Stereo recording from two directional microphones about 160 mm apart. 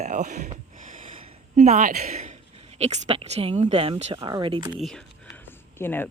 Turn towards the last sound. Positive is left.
turn(degrees=15)  # may be behind; listen again after turning